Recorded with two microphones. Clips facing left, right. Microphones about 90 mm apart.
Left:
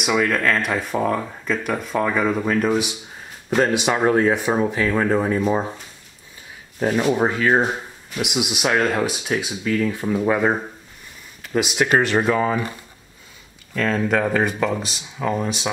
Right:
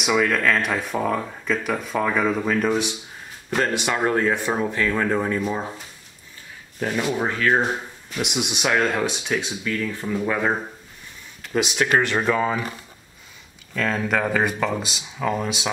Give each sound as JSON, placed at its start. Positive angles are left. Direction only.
{"t": 0.0, "sound": "speech", "side_deg": 0}
{"t": 6.8, "sound": "speech", "side_deg": 20}
{"t": 8.2, "sound": "speech", "side_deg": 5}
{"t": 9.8, "sound": "speech", "side_deg": 15}
{"t": 13.7, "sound": "speech", "side_deg": 0}